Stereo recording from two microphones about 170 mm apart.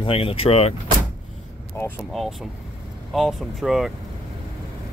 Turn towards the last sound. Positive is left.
turn(degrees=0)  # may be behind; listen again after turning